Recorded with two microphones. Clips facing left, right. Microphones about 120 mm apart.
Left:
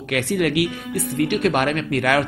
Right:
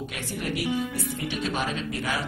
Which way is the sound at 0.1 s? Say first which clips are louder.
Left 17 dB; 80° left.